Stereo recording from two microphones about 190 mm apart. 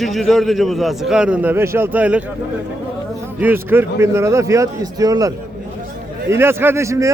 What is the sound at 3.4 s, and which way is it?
Speech, 10° right (ahead or behind).